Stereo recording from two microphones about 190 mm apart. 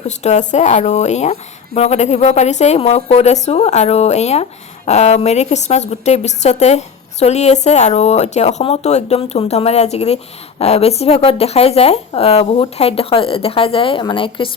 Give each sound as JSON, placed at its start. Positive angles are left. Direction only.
{"t": 0.2, "sound": "a woman's voice", "side_deg": 35}